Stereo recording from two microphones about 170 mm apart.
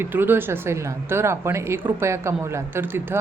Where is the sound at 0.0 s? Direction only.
10° right (ahead or behind).